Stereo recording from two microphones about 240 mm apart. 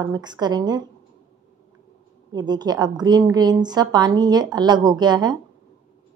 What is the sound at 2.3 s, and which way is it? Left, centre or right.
A woman's voice, centre.